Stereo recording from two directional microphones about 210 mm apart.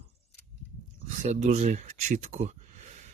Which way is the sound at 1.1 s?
35° right (ahead or behind).